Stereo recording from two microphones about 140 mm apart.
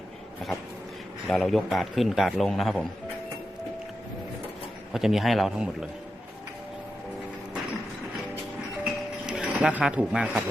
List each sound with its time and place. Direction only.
1.3 s a man's voice: centre (ahead or behind)
4.9 s a man's voice: 5° right (ahead or behind)
8.8 s a sound: 5° right (ahead or behind)